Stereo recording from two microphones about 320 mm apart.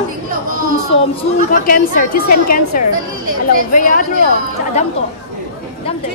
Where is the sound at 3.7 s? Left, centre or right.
Left.